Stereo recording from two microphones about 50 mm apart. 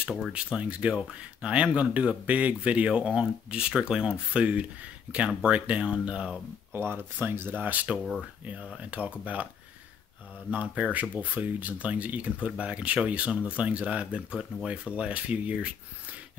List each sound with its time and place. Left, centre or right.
0.3 s speech: right
6.7 s speech: right
9.2 s speech: right
10.5 s speech: right